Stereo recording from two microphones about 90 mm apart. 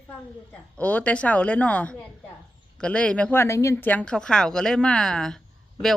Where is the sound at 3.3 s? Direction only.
30° left (ahead or behind).